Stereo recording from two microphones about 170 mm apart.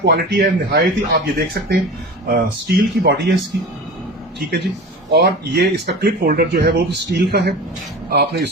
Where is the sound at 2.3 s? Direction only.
65° right (ahead or behind).